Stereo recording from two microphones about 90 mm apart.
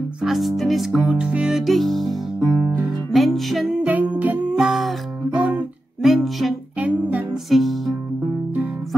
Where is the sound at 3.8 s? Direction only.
15° right (ahead or behind).